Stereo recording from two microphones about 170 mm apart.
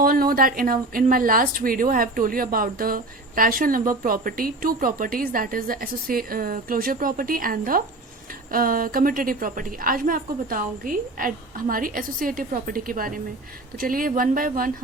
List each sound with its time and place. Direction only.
0.0 s a woman's voice: 55° right (ahead or behind)